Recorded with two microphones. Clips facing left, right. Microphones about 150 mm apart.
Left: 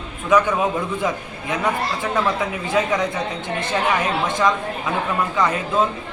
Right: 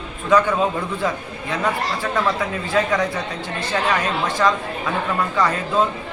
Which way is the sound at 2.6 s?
20° left (ahead or behind).